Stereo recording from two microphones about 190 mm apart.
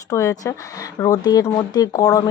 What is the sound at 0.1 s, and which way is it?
A woman's voice, 15° left (ahead or behind).